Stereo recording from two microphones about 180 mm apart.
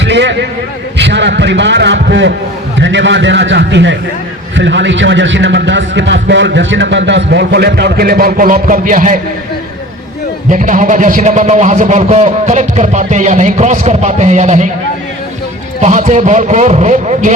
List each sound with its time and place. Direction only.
0.0 s a man's voice: 75° right (ahead or behind)
2.7 s a man's voice: 90° right; by 9.1 s 45° right (ahead or behind)
10.5 s a man's voice: 45° right (ahead or behind)
15.8 s a man's voice: 40° right (ahead or behind)